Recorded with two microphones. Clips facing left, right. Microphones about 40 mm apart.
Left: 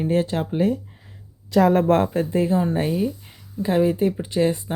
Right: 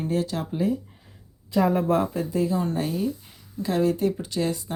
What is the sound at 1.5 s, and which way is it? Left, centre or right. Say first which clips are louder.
Speech: left 5 dB; left.